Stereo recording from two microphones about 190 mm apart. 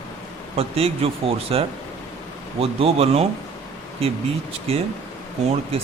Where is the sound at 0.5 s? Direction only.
30° right (ahead or behind).